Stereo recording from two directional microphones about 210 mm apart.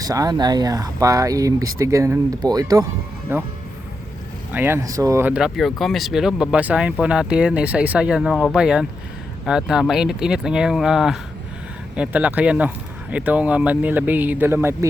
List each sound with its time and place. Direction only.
0.0 s speech: 15° right (ahead or behind)
4.5 s speech: 10° right (ahead or behind)